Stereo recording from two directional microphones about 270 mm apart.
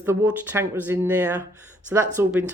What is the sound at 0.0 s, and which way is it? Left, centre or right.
Speech, centre.